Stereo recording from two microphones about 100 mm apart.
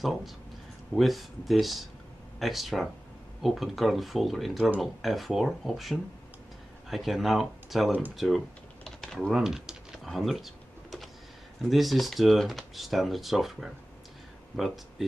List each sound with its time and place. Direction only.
0.9 s speech: centre (ahead or behind)
8.8 s typing: 5° left (ahead or behind)
11.7 s speech: centre (ahead or behind)